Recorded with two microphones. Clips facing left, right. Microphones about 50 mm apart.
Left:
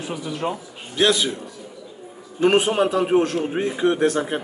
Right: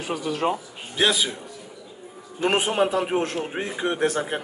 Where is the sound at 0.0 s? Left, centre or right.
Right.